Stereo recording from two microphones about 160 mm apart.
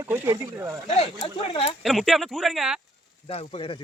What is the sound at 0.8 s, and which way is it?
Speech, 35° left (ahead or behind).